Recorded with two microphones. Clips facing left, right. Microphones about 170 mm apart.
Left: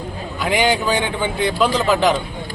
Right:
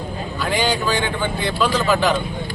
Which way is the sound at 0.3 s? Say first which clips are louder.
Left 3 dB; 15° left (ahead or behind).